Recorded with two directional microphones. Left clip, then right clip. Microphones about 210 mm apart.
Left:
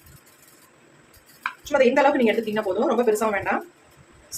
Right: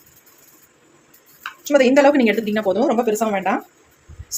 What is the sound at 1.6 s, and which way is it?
Speech, 40° right (ahead or behind).